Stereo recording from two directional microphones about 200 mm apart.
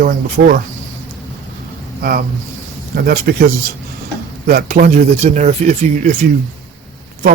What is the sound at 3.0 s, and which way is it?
A man's voice, 45° right (ahead or behind).